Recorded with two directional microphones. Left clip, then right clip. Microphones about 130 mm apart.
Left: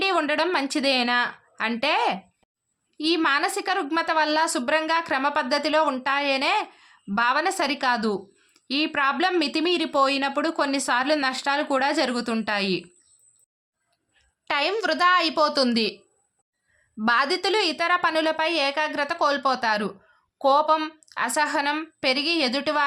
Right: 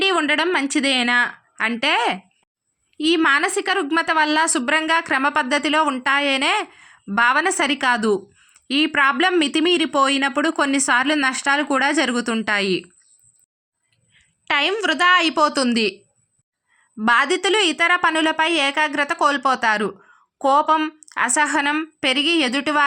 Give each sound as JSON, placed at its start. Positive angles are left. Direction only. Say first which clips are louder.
{"t": 0.0, "sound": "a sound", "louder": "right 4 dB", "side_deg": -10}
{"t": 0.3, "sound": "a woman's voice", "louder": "right 4 dB", "side_deg": -15}
{"t": 14.4, "sound": "a woman's voice", "louder": "right 5 dB", "side_deg": -20}
{"t": 17.0, "sound": "a woman's voice", "louder": "right 5 dB", "side_deg": -25}